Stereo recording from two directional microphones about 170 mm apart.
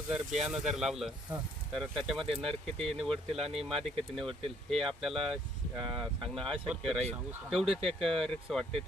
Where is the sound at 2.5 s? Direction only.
35° right (ahead or behind).